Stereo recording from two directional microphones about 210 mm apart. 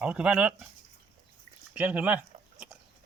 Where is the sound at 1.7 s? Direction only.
5° right (ahead or behind).